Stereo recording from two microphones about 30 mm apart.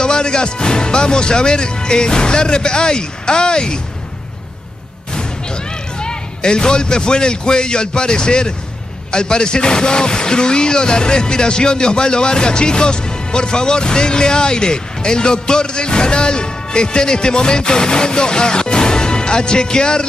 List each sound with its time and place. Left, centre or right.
0.0 s speech: left
5.1 s speech: left